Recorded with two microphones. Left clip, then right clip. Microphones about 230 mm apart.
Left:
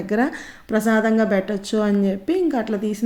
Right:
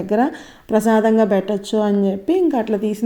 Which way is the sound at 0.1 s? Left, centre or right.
Centre.